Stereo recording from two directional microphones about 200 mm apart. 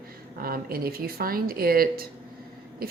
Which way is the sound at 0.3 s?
45° right (ahead or behind).